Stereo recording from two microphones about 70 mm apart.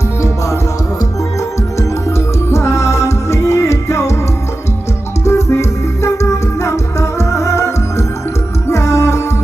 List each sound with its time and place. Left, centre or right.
2.0 s music: left
5.2 s music: left